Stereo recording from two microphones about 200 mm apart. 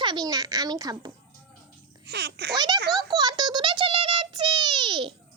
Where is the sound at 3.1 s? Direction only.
20° right (ahead or behind).